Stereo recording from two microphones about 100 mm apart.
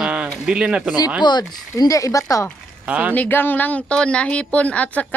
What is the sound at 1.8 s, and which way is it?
Speech, 35° left (ahead or behind).